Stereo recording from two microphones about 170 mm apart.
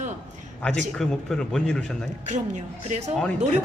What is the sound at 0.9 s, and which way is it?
Speech, 5° left (ahead or behind).